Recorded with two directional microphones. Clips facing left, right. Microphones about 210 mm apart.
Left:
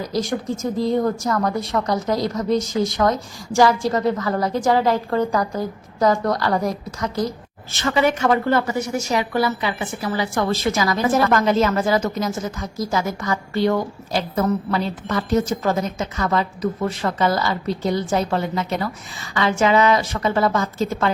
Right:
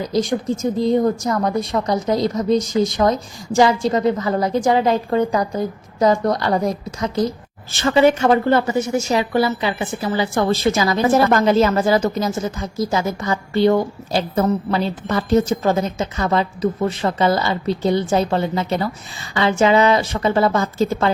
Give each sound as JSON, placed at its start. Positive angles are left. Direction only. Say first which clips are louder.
{"t": 0.0, "sound": "a woman's voice", "louder": "right 4 dB", "side_deg": -20}